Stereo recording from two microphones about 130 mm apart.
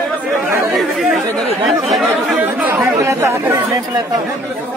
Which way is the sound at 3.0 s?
20° right (ahead or behind).